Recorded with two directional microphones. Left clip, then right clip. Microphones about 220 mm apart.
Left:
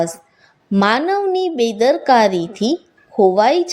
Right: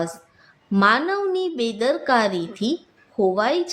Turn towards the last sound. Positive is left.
turn(degrees=20)  # may be behind; listen again after turning